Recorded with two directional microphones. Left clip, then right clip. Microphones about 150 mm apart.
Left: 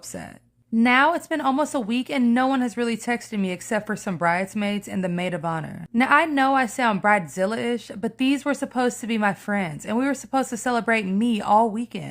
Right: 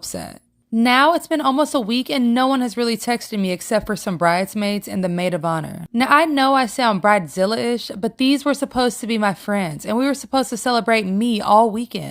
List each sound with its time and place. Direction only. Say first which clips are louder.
0.8 s speech: right 4 dB; 25° right (ahead or behind)